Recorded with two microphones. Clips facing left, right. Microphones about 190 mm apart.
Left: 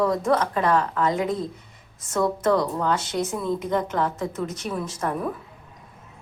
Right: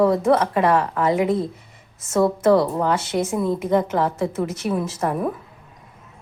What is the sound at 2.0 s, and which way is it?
A woman's voice, 25° right (ahead or behind).